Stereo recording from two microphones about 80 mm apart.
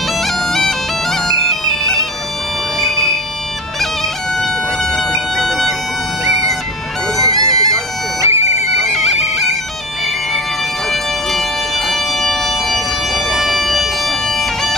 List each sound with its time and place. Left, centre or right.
0.5 s bagpipes: centre
4.9 s bagpipes: centre
7.2 s bagpipes: centre
7.7 s bagpipes: right
8.8 s bagpipes: centre
11.9 s bagpipes: centre